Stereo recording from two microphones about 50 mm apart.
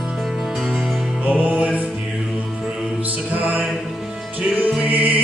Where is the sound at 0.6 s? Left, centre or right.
Centre.